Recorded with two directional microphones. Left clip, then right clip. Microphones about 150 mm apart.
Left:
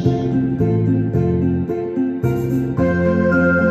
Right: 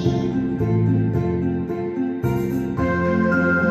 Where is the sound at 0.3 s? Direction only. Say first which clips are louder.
Left 4 dB; 20° left (ahead or behind).